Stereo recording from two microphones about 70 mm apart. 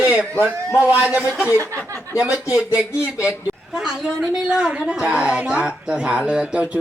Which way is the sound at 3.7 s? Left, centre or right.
Centre.